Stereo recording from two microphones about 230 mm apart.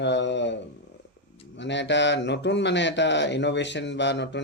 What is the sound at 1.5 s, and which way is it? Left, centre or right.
Speech, left.